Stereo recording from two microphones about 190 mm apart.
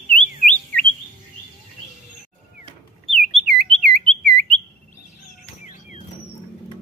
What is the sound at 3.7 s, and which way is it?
Alarm, 30° right (ahead or behind).